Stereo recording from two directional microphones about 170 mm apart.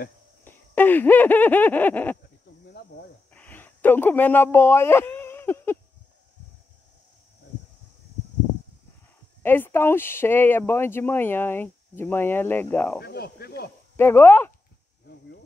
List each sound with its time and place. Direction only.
0.5 s a sound: 10° left (ahead or behind)
3.3 s speech: 10° left (ahead or behind)
9.4 s speech: 15° left (ahead or behind)
13.0 s speech: 70° left (ahead or behind)
13.9 s speech: 15° left (ahead or behind)